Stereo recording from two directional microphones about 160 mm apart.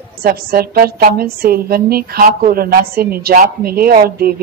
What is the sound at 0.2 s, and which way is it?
A woman's voice, 70° right (ahead or behind).